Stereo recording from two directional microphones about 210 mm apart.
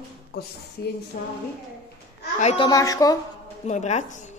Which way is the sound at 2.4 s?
30° left (ahead or behind).